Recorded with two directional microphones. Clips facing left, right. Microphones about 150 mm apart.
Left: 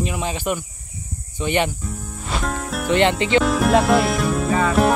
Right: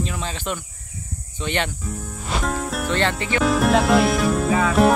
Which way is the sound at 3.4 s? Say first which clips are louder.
Even; centre (ahead or behind).